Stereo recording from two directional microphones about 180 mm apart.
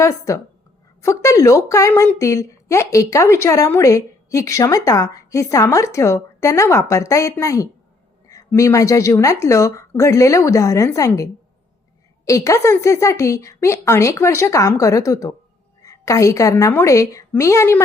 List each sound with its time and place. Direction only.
0.0 s a woman's voice: 15° left (ahead or behind)